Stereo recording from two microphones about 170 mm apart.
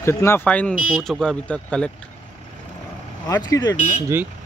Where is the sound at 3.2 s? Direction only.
20° left (ahead or behind).